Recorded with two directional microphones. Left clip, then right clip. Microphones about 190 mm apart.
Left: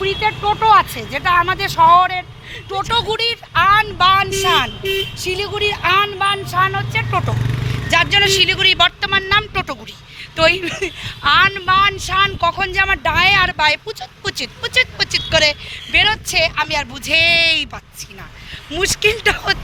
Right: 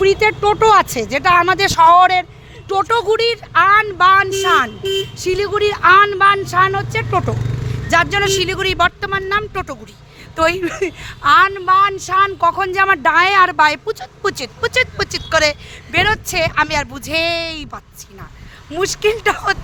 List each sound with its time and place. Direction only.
0.0 s speech: 80° right
2.8 s speech: 55° right (ahead or behind)
11.3 s speech: 35° right (ahead or behind); by 17.0 s 55° right (ahead or behind)
17.1 s speech: 35° right (ahead or behind)
18.7 s speech: 35° right (ahead or behind)